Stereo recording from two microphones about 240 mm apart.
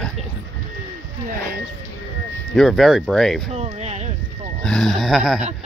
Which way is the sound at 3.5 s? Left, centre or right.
Right.